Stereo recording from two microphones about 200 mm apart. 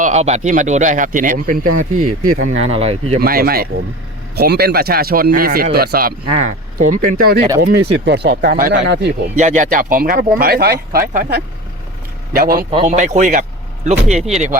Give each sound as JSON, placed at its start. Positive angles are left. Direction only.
{"t": 0.0, "sound": "speech", "side_deg": -35}
{"t": 3.2, "sound": "speech", "side_deg": -50}
{"t": 8.0, "sound": "speech", "side_deg": -55}
{"t": 8.8, "sound": "speech", "side_deg": -60}
{"t": 9.3, "sound": "speech", "side_deg": -35}
{"t": 12.7, "sound": "speech", "side_deg": -25}
{"t": 13.0, "sound": "speech", "side_deg": -40}